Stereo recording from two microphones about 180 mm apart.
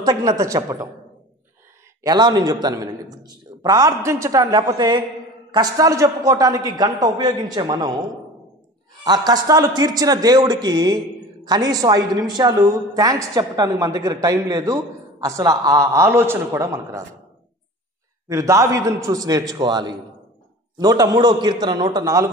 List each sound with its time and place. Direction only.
0.0 s a woman's voice: 20° right (ahead or behind)
2.0 s a woman's voice: 20° right (ahead or behind)
9.0 s a woman's voice: 20° right (ahead or behind)
18.3 s a man's voice: 15° right (ahead or behind)